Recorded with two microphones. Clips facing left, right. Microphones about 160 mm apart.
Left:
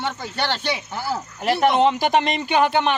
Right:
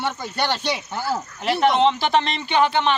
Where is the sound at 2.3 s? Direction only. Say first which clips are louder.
Left 2 dB; 45° left (ahead or behind).